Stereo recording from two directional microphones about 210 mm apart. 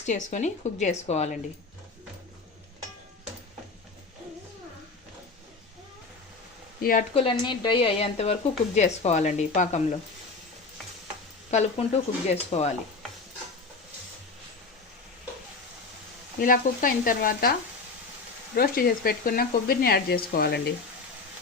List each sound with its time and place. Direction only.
0.0 s speech: 35° left (ahead or behind)
7.1 s speech: 25° left (ahead or behind)
11.5 s speech: 35° left (ahead or behind)
16.4 s speech: 40° left (ahead or behind)
18.5 s speech: 45° left (ahead or behind)